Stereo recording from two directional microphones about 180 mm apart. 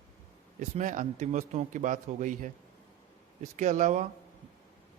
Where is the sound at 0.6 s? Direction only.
45° right (ahead or behind).